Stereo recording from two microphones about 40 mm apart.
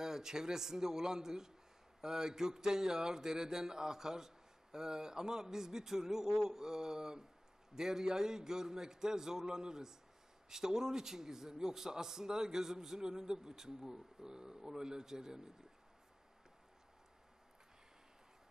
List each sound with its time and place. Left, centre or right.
0.0 s a man's voice: centre